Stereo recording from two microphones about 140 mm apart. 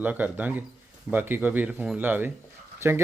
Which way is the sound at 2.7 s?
20° right (ahead or behind).